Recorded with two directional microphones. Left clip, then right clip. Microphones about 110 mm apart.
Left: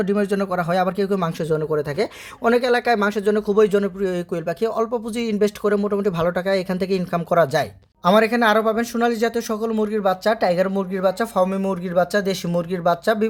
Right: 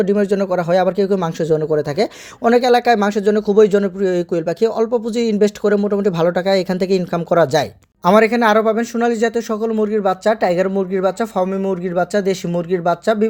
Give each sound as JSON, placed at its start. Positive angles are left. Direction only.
{"t": 0.0, "sound": "speech", "side_deg": -25}
{"t": 11.4, "sound": "speech", "side_deg": -5}